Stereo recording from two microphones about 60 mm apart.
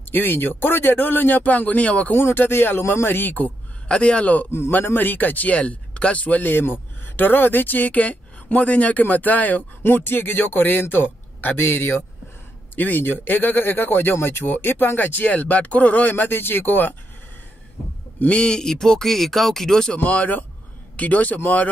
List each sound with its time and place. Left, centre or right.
0.1 s speech: left
2.1 s speech: left
3.9 s speech: centre
4.5 s a man's voice: left
4.8 s speech: left
18.3 s speech: centre
20.0 s a man's voice: left